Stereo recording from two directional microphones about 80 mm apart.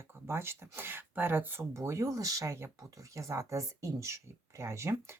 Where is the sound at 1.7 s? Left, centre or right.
Right.